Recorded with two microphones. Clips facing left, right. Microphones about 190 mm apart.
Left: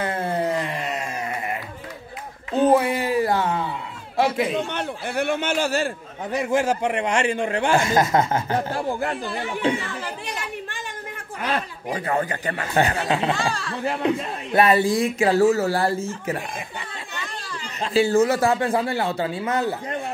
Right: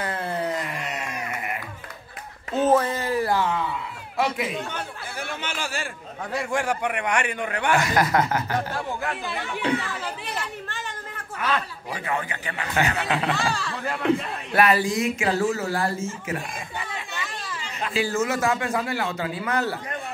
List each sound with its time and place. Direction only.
0.0 s a sound: 25° left (ahead or behind)
2.7 s a sound: 15° left (ahead or behind)
3.4 s a sound: 35° left (ahead or behind)
4.6 s a man's voice: 65° left (ahead or behind); by 5.9 s 40° left (ahead or behind)
6.3 s a man's voice: 20° left (ahead or behind)
10.0 s chatter: 10° left (ahead or behind)
11.3 s speech: 30° left (ahead or behind)
13.4 s speech: centre (ahead or behind)
13.8 s speech: 20° left (ahead or behind)
17.1 s chatter: 5° right (ahead or behind)
17.8 s speech: 30° left (ahead or behind)